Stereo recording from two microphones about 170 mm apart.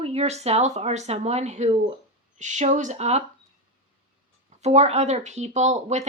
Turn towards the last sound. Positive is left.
turn(degrees=-40)  # may be behind; listen again after turning